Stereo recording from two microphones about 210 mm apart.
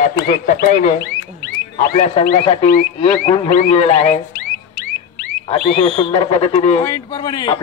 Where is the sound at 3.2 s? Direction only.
35° left (ahead or behind).